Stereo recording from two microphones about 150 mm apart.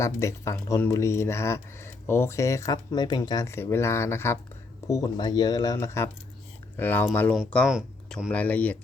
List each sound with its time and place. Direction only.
0.0 s speech: 20° left (ahead or behind)
7.7 s speech: 5° right (ahead or behind)
8.3 s speech: 10° left (ahead or behind)